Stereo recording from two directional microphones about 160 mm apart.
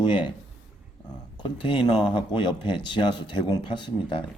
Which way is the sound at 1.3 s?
30° left (ahead or behind).